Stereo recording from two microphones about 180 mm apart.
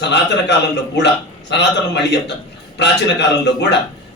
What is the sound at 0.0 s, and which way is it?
A man's voice, 75° left (ahead or behind).